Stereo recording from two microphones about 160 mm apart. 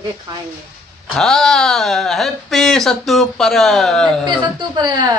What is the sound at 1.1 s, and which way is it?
Speech, 5° left (ahead or behind).